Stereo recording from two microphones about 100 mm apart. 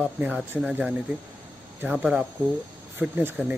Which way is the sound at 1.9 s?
5° right (ahead or behind).